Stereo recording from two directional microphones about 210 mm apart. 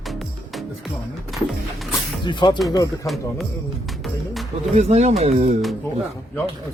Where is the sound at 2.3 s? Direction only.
20° left (ahead or behind).